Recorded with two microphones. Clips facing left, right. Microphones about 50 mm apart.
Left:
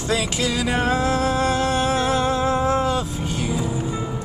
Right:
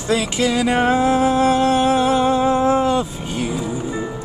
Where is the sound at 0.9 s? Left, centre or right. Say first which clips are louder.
Right 5 dB; centre.